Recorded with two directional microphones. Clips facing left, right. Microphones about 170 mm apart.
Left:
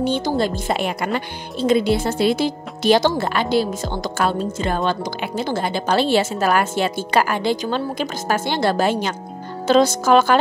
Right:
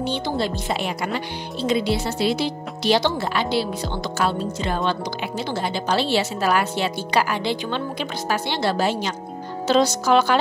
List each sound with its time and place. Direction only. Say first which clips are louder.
0.0 s speech: left 4 dB; 45° left (ahead or behind)